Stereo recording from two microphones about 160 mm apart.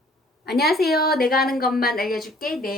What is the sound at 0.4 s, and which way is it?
Speech, 80° left.